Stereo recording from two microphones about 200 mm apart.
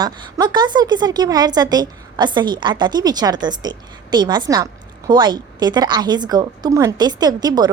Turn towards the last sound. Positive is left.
turn(degrees=-20)  # may be behind; listen again after turning